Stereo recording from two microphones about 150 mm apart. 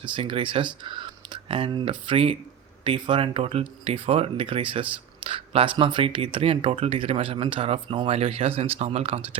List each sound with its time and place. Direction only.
0.0 s speech: 35° right (ahead or behind)